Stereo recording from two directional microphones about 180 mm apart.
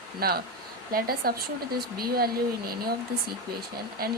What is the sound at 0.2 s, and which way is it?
Speech, 60° right (ahead or behind).